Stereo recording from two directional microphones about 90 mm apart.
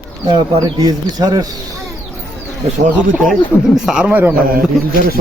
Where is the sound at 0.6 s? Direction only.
45° right (ahead or behind).